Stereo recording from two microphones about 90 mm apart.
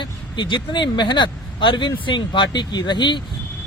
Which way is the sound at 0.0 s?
60° left (ahead or behind).